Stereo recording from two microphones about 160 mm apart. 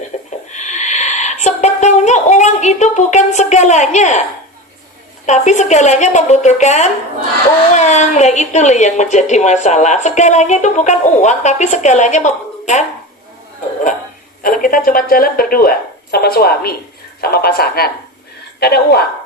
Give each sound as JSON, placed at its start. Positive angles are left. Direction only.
{"t": 0.3, "sound": "speech", "side_deg": 50}
{"t": 5.2, "sound": "a woman's voice", "side_deg": 45}
{"t": 14.4, "sound": "a woman's voice", "side_deg": 60}